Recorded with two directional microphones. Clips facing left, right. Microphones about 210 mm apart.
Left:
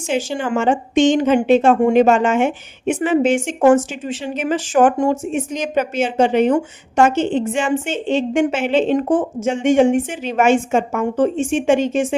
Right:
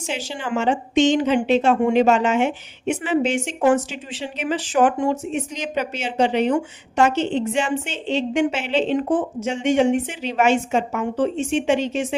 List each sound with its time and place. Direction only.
0.1 s speech: 50° left (ahead or behind)